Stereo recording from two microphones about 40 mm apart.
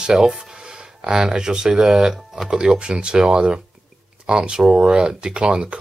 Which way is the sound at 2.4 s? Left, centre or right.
Right.